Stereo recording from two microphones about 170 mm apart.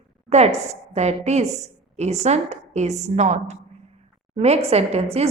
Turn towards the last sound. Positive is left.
turn(degrees=-35)  # may be behind; listen again after turning